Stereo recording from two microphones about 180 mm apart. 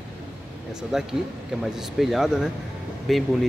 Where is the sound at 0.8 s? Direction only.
5° right (ahead or behind).